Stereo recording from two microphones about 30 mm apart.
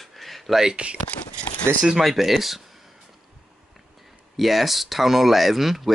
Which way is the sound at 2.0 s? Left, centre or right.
Centre.